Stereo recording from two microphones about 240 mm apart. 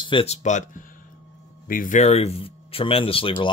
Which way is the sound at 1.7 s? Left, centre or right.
Left.